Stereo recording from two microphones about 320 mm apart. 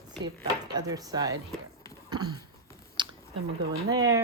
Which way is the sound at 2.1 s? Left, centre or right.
Centre.